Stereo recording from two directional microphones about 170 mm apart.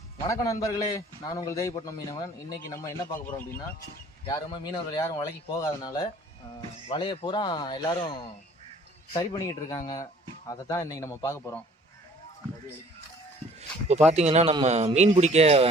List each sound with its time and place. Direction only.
0.3 s a man's voice: 20° left (ahead or behind)
4.3 s a man's voice: 25° left (ahead or behind)
9.1 s a man's voice: 20° left (ahead or behind)
13.6 s a sound: 40° right (ahead or behind)
14.1 s speech: 40° right (ahead or behind)